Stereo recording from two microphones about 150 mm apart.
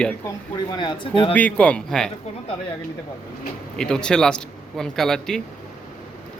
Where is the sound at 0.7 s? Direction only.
35° left (ahead or behind).